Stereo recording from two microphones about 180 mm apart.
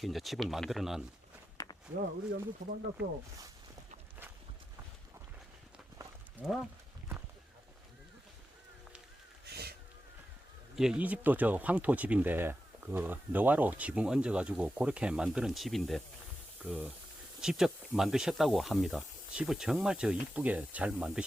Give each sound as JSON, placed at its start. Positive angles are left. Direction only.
{"t": 0.0, "sound": "speech", "side_deg": 0}
{"t": 2.3, "sound": "speech", "side_deg": -80}
{"t": 6.4, "sound": "speech", "side_deg": 0}
{"t": 9.5, "sound": "a sound", "side_deg": -60}
{"t": 10.8, "sound": "speech", "side_deg": -5}
{"t": 16.6, "sound": "speech", "side_deg": -10}